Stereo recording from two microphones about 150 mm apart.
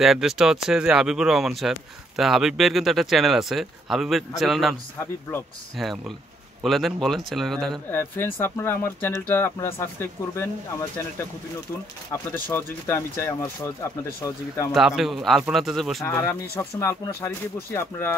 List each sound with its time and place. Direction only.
0.0 s speech: centre (ahead or behind)
5.8 s speech: centre (ahead or behind)
7.9 s speech: 15° left (ahead or behind)
12.1 s speech: 15° left (ahead or behind)
14.7 s speech: 5° right (ahead or behind)
16.1 s speech: 15° left (ahead or behind)